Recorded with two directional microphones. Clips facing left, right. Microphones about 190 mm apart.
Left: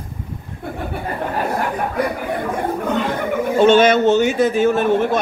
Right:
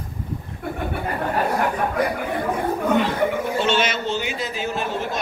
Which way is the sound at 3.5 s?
50° left (ahead or behind).